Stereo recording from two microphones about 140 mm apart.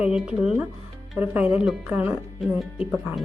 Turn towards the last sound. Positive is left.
turn(degrees=-5)  # may be behind; listen again after turning